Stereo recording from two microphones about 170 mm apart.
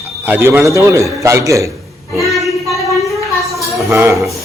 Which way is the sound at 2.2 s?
Centre (ahead or behind).